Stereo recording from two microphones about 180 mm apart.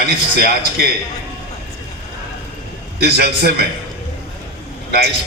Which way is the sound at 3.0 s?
65° right (ahead or behind).